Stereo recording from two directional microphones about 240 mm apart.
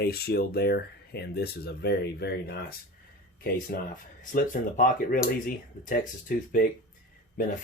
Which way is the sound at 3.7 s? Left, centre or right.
Left.